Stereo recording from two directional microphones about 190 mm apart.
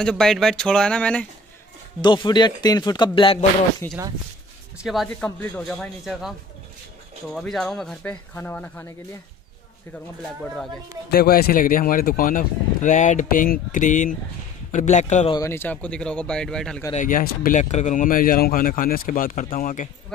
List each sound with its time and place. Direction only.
0.0 s speech: 5° left (ahead or behind)
2.0 s speech: 25° left (ahead or behind)
3.8 s speech: 10° left (ahead or behind)
4.8 s speech: centre (ahead or behind)
7.3 s speech: centre (ahead or behind)
11.1 s a man's voice: 55° left (ahead or behind); by 15.3 s 40° left (ahead or behind)
15.3 s speech: 15° left (ahead or behind)
16.9 s speech: 45° left (ahead or behind)